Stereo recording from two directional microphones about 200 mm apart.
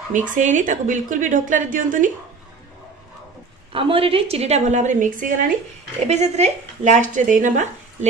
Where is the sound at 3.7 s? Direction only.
25° right (ahead or behind).